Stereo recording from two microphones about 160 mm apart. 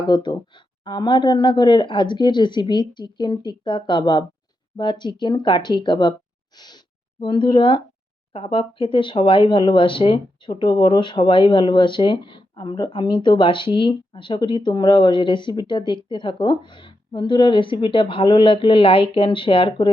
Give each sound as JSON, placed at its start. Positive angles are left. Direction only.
{"t": 0.0, "sound": "speech", "side_deg": 25}
{"t": 7.2, "sound": "speech", "side_deg": 30}